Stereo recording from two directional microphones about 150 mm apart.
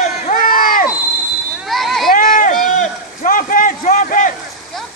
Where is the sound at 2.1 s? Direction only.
70° left (ahead or behind).